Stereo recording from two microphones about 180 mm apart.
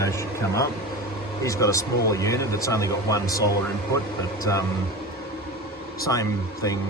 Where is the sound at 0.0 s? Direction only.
15° left (ahead or behind).